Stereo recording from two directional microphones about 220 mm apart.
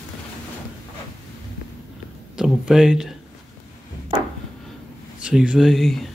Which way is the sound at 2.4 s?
5° right (ahead or behind).